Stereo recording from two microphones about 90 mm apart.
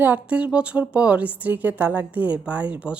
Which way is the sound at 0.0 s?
15° right (ahead or behind).